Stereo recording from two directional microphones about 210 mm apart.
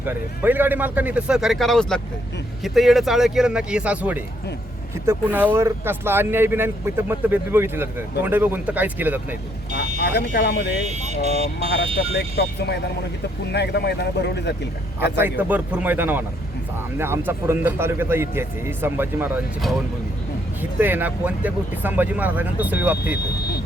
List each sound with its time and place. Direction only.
0.0 s speech: 10° right (ahead or behind)
10.0 s speech: 50° left (ahead or behind)
10.8 s speech: 35° right (ahead or behind)
12.1 s speech: 50° left (ahead or behind)
15.2 s speech: 10° right (ahead or behind)